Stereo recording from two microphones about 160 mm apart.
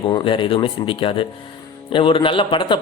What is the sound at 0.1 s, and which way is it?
Speech, 30° left (ahead or behind).